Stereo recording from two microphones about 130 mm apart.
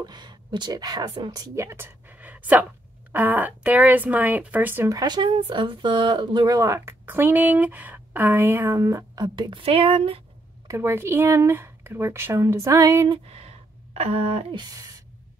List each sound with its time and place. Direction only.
0.0 s a woman's voice: 35° right (ahead or behind); by 4.9 s 15° right (ahead or behind)
4.9 s speech: 35° right (ahead or behind)
10.7 s speech: 20° right (ahead or behind)
13.9 s speech: 50° right (ahead or behind)